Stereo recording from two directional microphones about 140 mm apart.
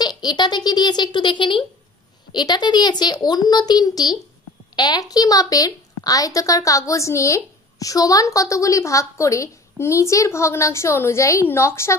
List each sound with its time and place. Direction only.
0.0 s a child's voice: 30° left (ahead or behind)